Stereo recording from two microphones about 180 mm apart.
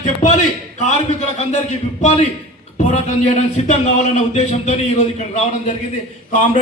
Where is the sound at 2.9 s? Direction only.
35° left (ahead or behind).